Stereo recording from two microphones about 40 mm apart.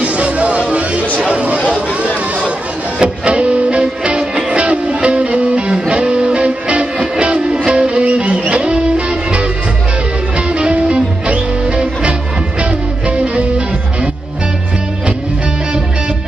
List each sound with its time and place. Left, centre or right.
0.0 s music: right
1.2 s chatter: right
3.0 s music: right
10.5 s music: right